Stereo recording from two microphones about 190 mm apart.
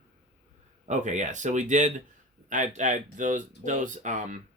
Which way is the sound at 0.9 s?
40° right (ahead or behind).